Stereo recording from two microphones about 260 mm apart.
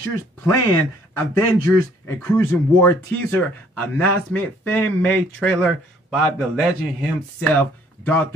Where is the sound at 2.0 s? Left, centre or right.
Centre.